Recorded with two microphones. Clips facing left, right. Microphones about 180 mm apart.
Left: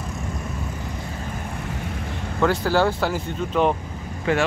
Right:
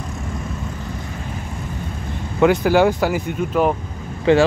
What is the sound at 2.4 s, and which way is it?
Speech, 15° right (ahead or behind).